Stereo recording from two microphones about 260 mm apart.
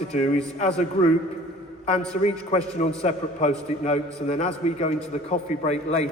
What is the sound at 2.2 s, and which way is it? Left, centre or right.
A man's voice, left.